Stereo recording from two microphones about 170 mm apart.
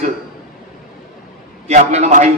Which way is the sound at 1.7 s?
40° right (ahead or behind).